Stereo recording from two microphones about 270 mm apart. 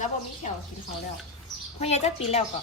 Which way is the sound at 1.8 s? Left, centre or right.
Left.